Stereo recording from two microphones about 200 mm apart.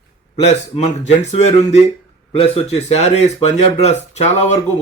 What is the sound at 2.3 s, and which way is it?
Speech, 30° left (ahead or behind).